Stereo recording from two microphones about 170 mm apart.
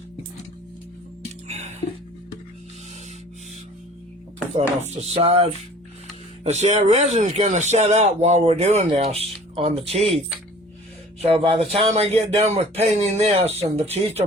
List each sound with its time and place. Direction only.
1.5 s music: 40° right (ahead or behind)
4.9 s speech: 35° right (ahead or behind)
11.2 s speech: 35° right (ahead or behind)